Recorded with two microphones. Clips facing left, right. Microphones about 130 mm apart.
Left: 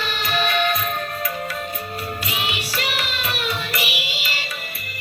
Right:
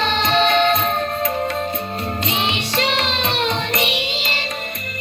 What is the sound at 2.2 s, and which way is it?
Music, 30° right (ahead or behind).